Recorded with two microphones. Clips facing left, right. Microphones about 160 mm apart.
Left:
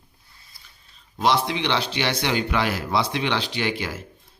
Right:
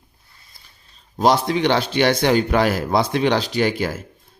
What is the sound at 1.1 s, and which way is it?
A man's voice, 40° right (ahead or behind).